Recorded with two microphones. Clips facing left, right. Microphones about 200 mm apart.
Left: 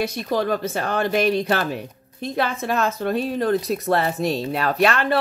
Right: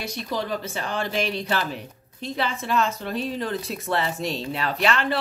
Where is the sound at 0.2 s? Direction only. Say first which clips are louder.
Left 3 dB; 50° left (ahead or behind).